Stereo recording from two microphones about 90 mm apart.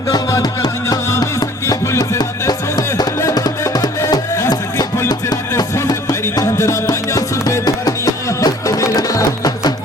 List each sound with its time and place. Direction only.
0.1 s music: 40° left (ahead or behind)
5.7 s music: 35° left (ahead or behind)